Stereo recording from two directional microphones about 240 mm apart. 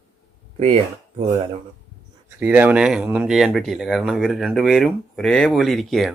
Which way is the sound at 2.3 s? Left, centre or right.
Centre.